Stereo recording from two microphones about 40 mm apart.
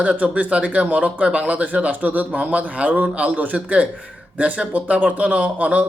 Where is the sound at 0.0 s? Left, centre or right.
Right.